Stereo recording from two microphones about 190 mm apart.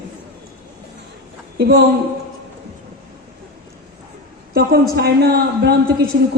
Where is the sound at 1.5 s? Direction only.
60° right (ahead or behind).